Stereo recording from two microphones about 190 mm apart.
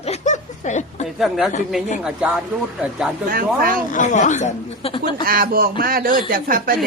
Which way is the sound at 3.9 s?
40° left (ahead or behind).